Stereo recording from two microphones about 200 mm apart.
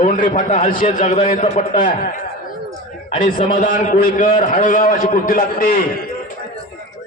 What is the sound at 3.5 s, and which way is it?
A man's voice, 40° left (ahead or behind).